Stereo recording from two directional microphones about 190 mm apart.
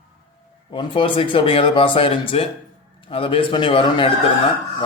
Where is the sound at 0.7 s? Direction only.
25° left (ahead or behind).